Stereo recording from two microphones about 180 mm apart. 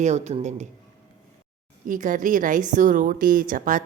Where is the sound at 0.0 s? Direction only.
40° right (ahead or behind).